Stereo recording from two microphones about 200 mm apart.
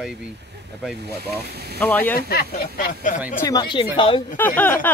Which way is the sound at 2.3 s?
50° left (ahead or behind).